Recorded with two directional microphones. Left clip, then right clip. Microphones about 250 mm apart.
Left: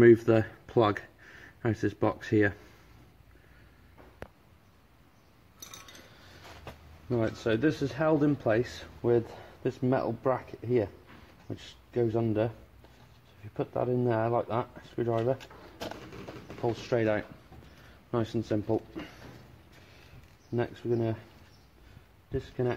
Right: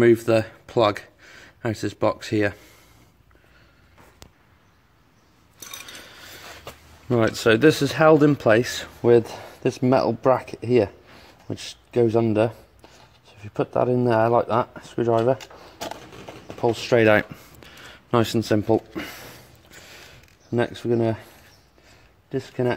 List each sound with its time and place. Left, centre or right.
0.0 s speech: centre
7.1 s speech: right
16.6 s speech: right
20.5 s speech: right
22.3 s speech: right